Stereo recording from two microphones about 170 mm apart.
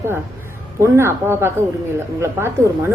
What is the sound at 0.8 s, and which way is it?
A woman's voice, 15° right (ahead or behind).